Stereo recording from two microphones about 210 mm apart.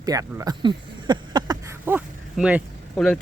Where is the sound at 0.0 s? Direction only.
15° right (ahead or behind).